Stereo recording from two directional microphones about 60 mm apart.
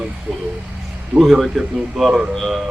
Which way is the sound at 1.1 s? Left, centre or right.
Centre.